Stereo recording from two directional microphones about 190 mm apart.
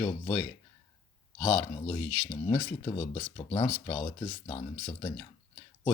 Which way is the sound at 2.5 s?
20° left (ahead or behind).